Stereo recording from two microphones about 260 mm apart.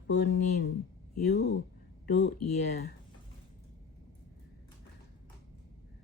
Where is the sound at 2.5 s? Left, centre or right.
Left.